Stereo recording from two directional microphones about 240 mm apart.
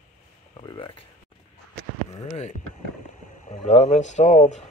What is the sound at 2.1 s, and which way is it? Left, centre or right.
Speech, left.